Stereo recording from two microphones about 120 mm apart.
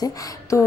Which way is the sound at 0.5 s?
25° left (ahead or behind).